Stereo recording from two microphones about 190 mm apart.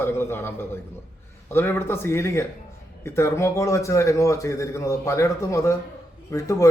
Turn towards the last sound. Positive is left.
turn(degrees=15)  # may be behind; listen again after turning